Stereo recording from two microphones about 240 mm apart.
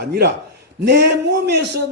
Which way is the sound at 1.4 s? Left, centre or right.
Right.